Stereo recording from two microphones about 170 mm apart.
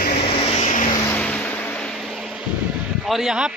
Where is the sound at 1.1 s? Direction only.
10° left (ahead or behind).